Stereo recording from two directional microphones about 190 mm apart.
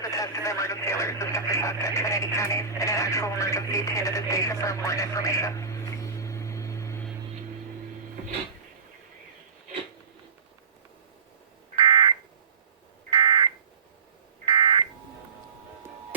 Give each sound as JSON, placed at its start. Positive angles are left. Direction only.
{"t": 0.0, "sound": "speech", "side_deg": 15}
{"t": 11.8, "sound": "a sound", "side_deg": -25}
{"t": 13.1, "sound": "fire alarm", "side_deg": -25}